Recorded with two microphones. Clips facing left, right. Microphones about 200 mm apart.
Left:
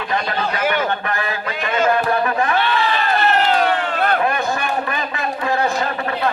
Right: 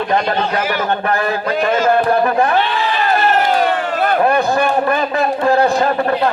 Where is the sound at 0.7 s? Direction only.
40° right (ahead or behind).